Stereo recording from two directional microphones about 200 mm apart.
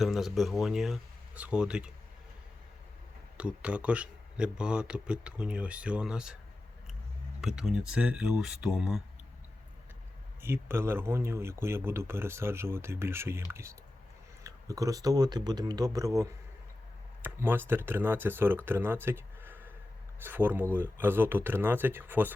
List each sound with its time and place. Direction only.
0.0 s speech: centre (ahead or behind)
3.3 s speech: 5° right (ahead or behind)
7.4 s speech: 5° right (ahead or behind)
10.4 s speech: 10° right (ahead or behind)